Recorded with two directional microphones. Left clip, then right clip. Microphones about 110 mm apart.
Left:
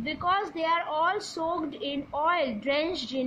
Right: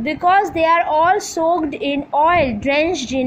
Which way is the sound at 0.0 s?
35° right (ahead or behind).